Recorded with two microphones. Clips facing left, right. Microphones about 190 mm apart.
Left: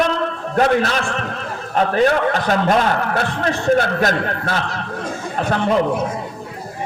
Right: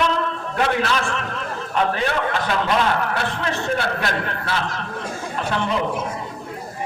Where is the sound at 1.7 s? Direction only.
40° left (ahead or behind).